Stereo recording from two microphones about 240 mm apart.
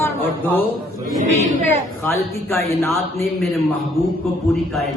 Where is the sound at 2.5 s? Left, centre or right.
Centre.